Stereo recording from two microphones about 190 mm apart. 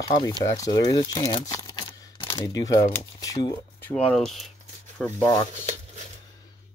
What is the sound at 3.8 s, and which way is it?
Speech, 5° left (ahead or behind).